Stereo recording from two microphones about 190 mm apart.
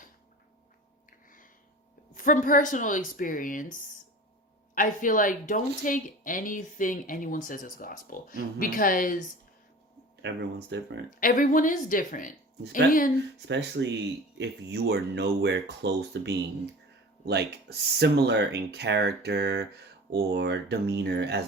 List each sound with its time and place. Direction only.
2.1 s speech: 45° left (ahead or behind)
10.2 s speech: 65° right (ahead or behind)
11.2 s speech: 45° left (ahead or behind)
13.5 s speech: 65° right (ahead or behind)